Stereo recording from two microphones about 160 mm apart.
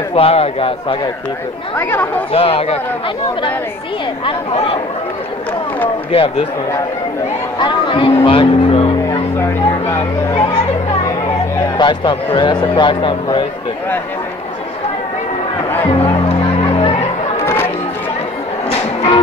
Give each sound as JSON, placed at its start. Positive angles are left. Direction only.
{"t": 0.1, "sound": "a man's voice", "side_deg": 40}
{"t": 1.8, "sound": "speech", "side_deg": 10}
{"t": 2.3, "sound": "a man's voice", "side_deg": 40}
{"t": 4.3, "sound": "a man's voice", "side_deg": 35}
{"t": 6.1, "sound": "a man's voice", "side_deg": 35}
{"t": 7.5, "sound": "music", "side_deg": 30}
{"t": 9.4, "sound": "vehicle", "side_deg": 15}
{"t": 11.8, "sound": "a man's voice", "side_deg": 30}
{"t": 15.9, "sound": "music", "side_deg": 35}
{"t": 17.4, "sound": "chatter", "side_deg": 15}